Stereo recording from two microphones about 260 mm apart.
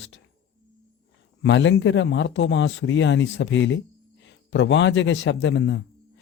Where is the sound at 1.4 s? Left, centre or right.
Left.